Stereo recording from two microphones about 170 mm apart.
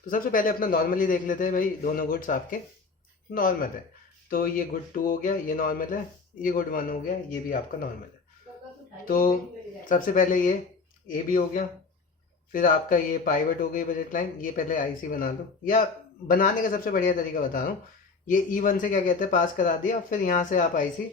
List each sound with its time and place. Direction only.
0.1 s speech: 55° left (ahead or behind)
9.0 s speech: 55° left (ahead or behind)